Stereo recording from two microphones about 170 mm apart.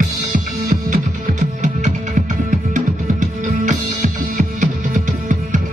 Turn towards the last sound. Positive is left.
turn(degrees=-50)  # may be behind; listen again after turning